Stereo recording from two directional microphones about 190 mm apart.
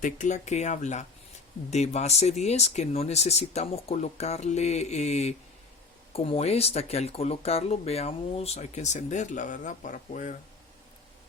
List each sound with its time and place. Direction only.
0.0 s speech: 40° left (ahead or behind)